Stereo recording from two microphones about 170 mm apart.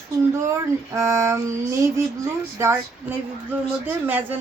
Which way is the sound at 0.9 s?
15° right (ahead or behind).